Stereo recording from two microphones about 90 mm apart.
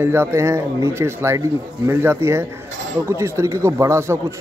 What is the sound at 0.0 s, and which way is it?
A man's voice, 30° right (ahead or behind).